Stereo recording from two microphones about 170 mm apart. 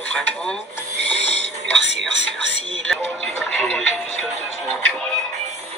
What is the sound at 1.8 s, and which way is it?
Speech, 90° right.